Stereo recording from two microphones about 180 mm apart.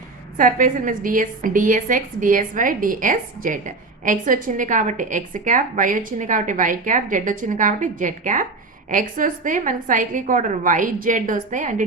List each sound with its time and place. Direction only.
0.3 s a woman's voice: 50° right (ahead or behind)